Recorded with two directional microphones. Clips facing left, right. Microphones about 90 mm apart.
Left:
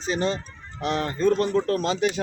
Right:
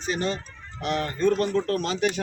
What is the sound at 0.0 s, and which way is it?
Speech, 30° left (ahead or behind).